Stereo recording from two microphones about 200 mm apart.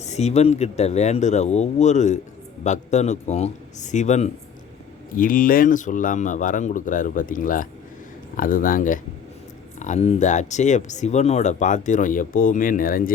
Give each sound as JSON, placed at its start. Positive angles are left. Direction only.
{"t": 0.0, "sound": "speech", "side_deg": 35}